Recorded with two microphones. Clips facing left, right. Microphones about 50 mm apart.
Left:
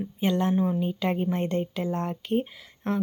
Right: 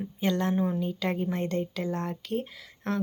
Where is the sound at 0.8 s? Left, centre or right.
Left.